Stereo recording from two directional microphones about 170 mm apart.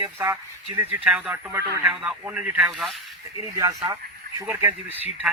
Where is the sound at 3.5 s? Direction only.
20° right (ahead or behind).